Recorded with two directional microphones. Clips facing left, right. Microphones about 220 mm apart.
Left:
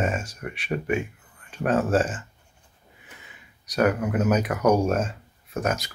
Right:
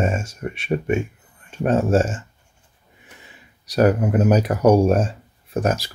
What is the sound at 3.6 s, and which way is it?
Speech, 30° right (ahead or behind).